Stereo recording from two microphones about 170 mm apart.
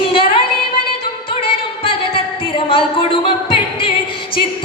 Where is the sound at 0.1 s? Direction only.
30° left (ahead or behind).